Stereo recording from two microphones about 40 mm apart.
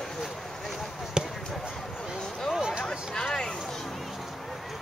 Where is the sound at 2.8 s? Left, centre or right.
Centre.